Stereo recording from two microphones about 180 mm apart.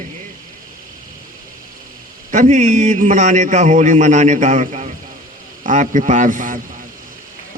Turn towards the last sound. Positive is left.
turn(degrees=-45)  # may be behind; listen again after turning